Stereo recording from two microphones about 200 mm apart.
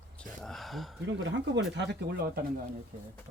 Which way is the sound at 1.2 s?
65° right (ahead or behind).